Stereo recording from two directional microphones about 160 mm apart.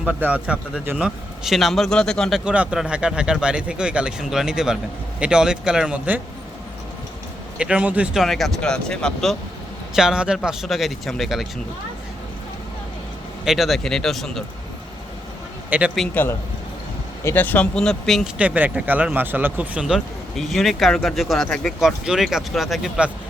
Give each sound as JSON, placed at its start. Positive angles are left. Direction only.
{"t": 0.0, "sound": "speech", "side_deg": -10}
{"t": 2.4, "sound": "speech", "side_deg": -5}
{"t": 7.6, "sound": "speech", "side_deg": -5}
{"t": 13.4, "sound": "speech", "side_deg": 0}
{"t": 15.7, "sound": "a man's voice", "side_deg": -10}
{"t": 17.2, "sound": "speech", "side_deg": 10}